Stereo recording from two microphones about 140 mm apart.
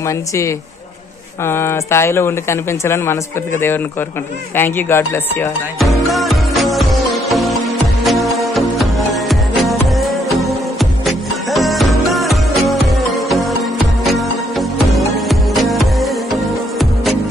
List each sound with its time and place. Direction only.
0.0 s a woman's voice: 20° left (ahead or behind)
5.8 s music: centre (ahead or behind)